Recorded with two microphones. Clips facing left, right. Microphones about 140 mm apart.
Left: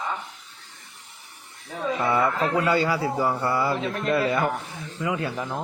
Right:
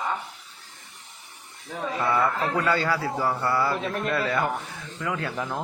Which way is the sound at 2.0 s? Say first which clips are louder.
Left 1 dB; 15° left (ahead or behind).